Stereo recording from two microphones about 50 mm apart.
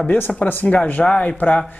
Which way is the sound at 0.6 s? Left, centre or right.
Left.